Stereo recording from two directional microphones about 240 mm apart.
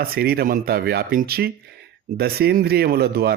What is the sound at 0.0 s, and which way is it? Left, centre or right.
Speech, right.